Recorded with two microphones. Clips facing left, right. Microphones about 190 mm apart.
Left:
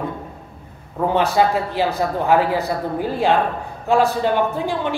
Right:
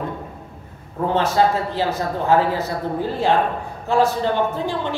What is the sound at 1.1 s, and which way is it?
Speech, 15° left (ahead or behind).